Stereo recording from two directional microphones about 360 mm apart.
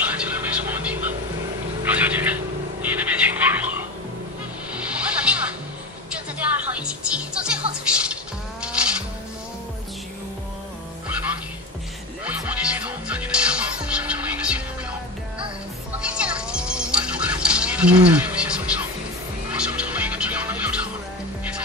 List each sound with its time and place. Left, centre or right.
0.2 s a sound: centre
2.8 s frog: centre
4.7 s music: centre
12.3 s music: centre
16.0 s music: centre